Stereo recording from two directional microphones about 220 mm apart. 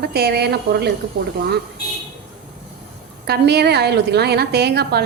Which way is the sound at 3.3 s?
45° right (ahead or behind).